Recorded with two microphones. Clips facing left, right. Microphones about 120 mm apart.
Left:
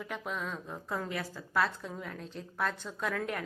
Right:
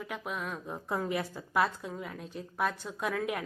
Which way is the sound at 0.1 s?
5° right (ahead or behind).